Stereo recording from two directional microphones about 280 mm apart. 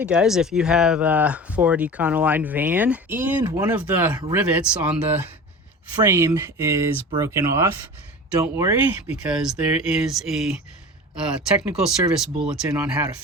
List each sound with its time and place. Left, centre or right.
0.0 s speech: centre